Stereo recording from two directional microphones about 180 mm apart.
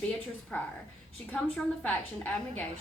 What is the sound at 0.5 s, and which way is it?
A woman's voice, 5° left (ahead or behind).